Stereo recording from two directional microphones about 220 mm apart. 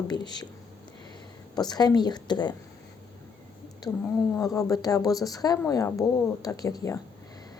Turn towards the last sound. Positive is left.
turn(degrees=15)  # may be behind; listen again after turning